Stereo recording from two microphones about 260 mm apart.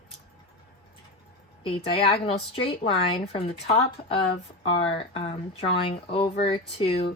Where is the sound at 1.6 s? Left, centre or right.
Left.